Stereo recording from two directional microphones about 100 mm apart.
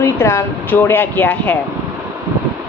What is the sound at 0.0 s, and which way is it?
A woman's voice, 25° left (ahead or behind).